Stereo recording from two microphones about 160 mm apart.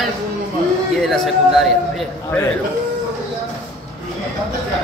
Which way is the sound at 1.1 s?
Centre (ahead or behind).